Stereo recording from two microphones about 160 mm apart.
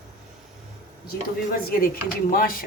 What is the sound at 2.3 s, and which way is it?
Speech, 65° left (ahead or behind).